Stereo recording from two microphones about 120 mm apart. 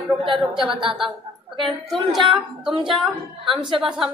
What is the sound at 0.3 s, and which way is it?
Speech, 5° right (ahead or behind).